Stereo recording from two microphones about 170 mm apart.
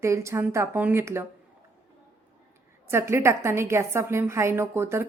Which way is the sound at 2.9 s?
15° right (ahead or behind).